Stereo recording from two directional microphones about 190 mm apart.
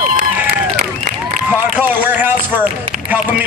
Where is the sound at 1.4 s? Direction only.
10° right (ahead or behind).